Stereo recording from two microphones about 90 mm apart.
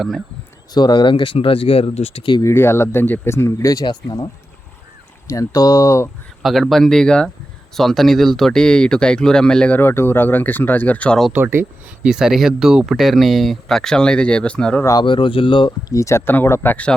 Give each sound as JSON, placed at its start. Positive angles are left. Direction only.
{"t": 0.7, "sound": "speech", "side_deg": 50}
{"t": 2.4, "sound": "speech", "side_deg": 30}
{"t": 3.8, "sound": "speech", "side_deg": 50}
{"t": 5.3, "sound": "speech", "side_deg": 40}
{"t": 6.4, "sound": "speech", "side_deg": 0}
{"t": 9.8, "sound": "speech", "side_deg": 25}
{"t": 11.3, "sound": "speech", "side_deg": -20}
{"t": 12.0, "sound": "speech", "side_deg": -5}
{"t": 15.0, "sound": "speech", "side_deg": 70}
{"t": 15.9, "sound": "speech", "side_deg": 35}